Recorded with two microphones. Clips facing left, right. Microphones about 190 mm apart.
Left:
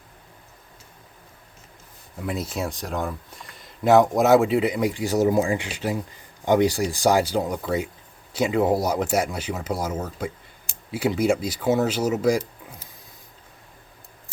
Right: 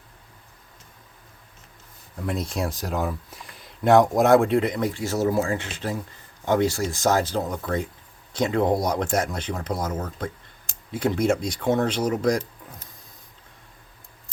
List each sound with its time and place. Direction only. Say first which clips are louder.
2.1 s speech: even; 5° left (ahead or behind)